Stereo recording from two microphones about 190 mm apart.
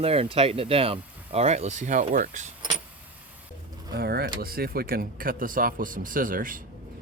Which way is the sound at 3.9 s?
55° right (ahead or behind).